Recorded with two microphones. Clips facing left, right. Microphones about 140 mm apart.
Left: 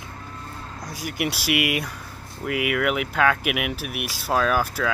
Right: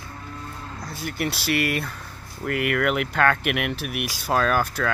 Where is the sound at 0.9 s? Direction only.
10° left (ahead or behind).